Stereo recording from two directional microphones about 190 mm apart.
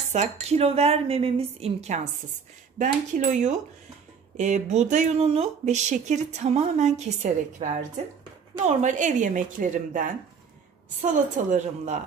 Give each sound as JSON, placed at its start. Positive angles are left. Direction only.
{"t": 0.1, "sound": "speech", "side_deg": -35}
{"t": 11.5, "sound": "speech", "side_deg": -40}